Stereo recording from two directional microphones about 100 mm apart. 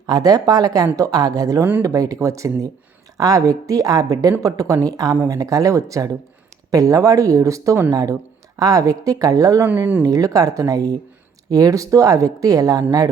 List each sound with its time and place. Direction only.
0.1 s a woman's voice: 40° right (ahead or behind)
9.6 s speech: 15° right (ahead or behind)
10.0 s a woman's voice: 35° right (ahead or behind)